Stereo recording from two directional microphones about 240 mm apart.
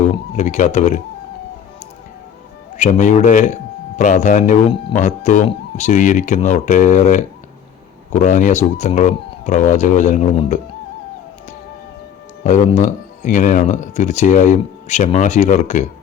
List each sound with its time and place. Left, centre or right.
0.1 s speech: left
2.7 s speech: left
12.4 s speech: left